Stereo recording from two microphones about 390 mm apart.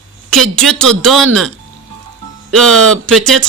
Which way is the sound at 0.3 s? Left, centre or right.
Centre.